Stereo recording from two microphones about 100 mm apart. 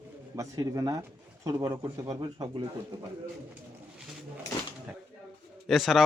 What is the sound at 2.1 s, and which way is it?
Speech, 40° right (ahead or behind).